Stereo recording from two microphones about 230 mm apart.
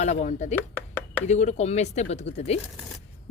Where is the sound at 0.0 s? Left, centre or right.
Left.